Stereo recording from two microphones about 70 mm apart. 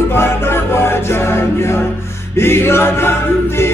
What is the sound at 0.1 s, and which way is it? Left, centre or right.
Music, left.